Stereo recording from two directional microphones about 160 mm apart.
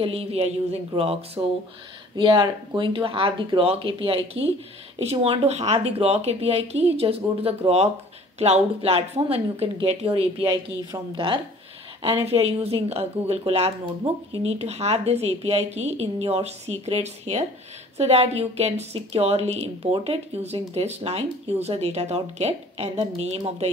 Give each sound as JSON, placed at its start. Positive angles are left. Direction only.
{"t": 0.0, "sound": "a woman's voice", "side_deg": -40}
{"t": 10.4, "sound": "a woman's voice", "side_deg": -20}